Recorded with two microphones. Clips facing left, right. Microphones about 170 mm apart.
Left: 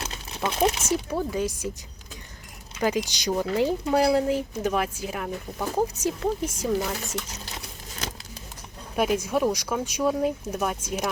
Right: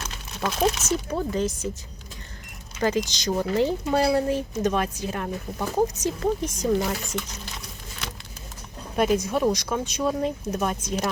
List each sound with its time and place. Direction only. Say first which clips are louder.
0.4 s speech: even; 15° left (ahead or behind)
2.8 s speech: right 1 dB; 10° left (ahead or behind)
9.0 s speech: right 1 dB; 10° left (ahead or behind)